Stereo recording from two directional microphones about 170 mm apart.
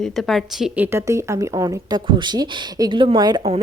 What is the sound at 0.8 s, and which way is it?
A woman's voice, 15° right (ahead or behind).